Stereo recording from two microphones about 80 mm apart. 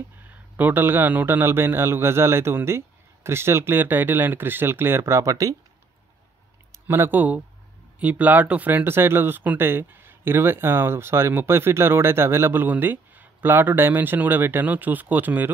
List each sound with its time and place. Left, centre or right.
0.6 s speech: right
6.9 s speech: right